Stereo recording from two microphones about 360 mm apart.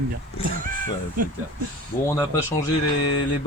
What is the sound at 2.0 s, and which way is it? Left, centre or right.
Speech, centre.